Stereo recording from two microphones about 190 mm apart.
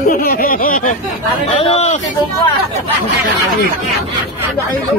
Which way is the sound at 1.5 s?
35° left (ahead or behind).